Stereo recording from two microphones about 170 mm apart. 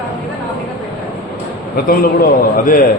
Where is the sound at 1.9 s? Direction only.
55° left (ahead or behind).